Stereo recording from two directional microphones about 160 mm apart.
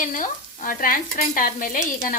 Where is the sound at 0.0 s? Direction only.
55° left (ahead or behind).